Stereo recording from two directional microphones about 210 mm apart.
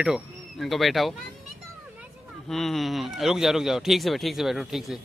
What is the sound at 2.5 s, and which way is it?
Speech, centre (ahead or behind).